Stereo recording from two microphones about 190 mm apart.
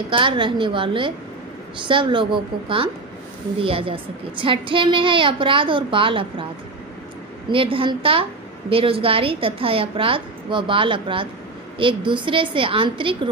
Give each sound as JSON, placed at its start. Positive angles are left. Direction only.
{"t": 0.1, "sound": "a woman's voice", "side_deg": -25}
{"t": 7.4, "sound": "a woman's voice", "side_deg": -30}